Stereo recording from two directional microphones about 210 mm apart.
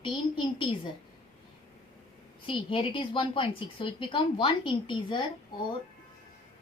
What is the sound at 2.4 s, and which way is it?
A woman's voice, 25° left (ahead or behind).